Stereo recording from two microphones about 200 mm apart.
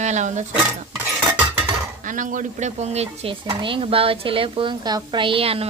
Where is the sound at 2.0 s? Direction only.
40° right (ahead or behind).